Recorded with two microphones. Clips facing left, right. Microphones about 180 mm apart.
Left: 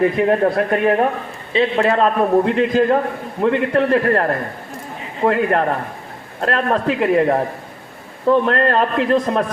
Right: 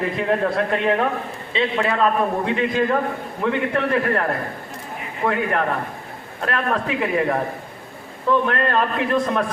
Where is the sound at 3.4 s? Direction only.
40° left (ahead or behind).